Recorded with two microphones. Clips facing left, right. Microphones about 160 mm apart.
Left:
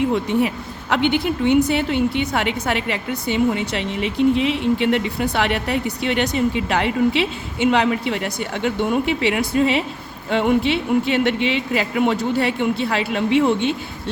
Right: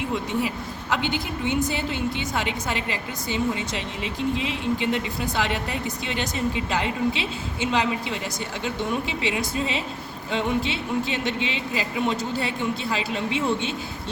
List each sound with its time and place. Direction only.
0.1 s a woman's voice: 60° left (ahead or behind)